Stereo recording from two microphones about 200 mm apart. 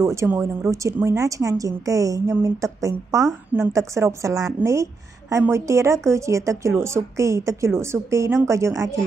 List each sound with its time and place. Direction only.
0.0 s a woman's voice: 15° right (ahead or behind)